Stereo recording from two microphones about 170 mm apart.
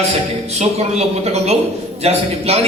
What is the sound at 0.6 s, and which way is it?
A man's voice, 40° right (ahead or behind).